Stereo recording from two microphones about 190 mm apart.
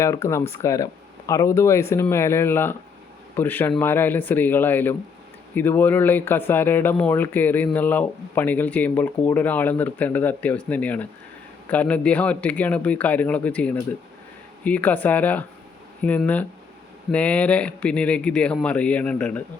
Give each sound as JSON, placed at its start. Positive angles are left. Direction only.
{"t": 0.0, "sound": "speech", "side_deg": 15}